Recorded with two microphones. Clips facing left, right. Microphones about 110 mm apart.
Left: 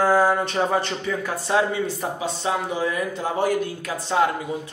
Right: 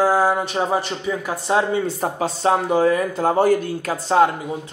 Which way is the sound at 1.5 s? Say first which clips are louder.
Right 3 dB; 35° right (ahead or behind).